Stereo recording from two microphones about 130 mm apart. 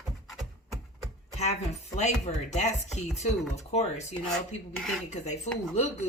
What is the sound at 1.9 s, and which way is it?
Speech, 60° left (ahead or behind).